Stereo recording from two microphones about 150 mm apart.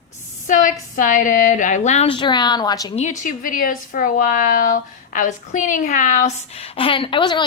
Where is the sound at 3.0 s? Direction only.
55° left (ahead or behind).